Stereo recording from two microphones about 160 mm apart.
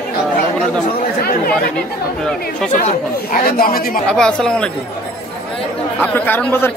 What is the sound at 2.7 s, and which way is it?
Speech, 55° left (ahead or behind).